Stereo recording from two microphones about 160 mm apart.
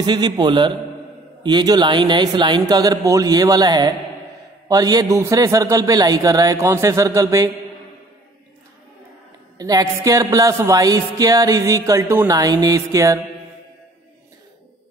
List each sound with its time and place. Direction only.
0.0 s music: 25° right (ahead or behind)
9.6 s music: 25° right (ahead or behind)